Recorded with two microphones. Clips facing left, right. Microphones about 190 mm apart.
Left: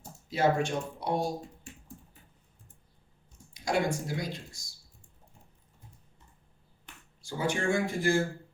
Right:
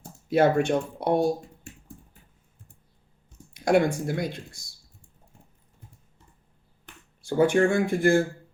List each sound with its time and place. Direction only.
0.3 s speech: 60° right (ahead or behind)
3.5 s speech: 60° right (ahead or behind)
7.2 s speech: 55° right (ahead or behind)